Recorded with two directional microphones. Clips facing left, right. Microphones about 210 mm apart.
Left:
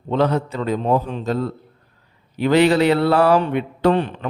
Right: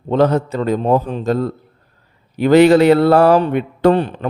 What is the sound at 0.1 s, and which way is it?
A man's voice, 45° right (ahead or behind).